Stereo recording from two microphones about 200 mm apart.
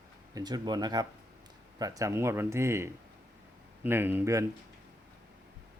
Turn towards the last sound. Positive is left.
turn(degrees=-10)  # may be behind; listen again after turning